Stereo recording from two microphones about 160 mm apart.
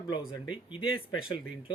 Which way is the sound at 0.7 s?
30° left (ahead or behind).